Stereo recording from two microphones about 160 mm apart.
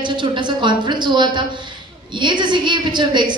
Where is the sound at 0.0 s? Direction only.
30° right (ahead or behind).